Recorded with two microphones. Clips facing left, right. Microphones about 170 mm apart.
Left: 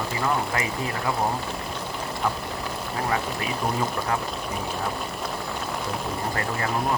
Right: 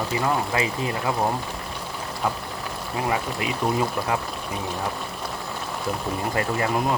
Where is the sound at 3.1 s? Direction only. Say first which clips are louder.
Right 2 dB; 15° right (ahead or behind).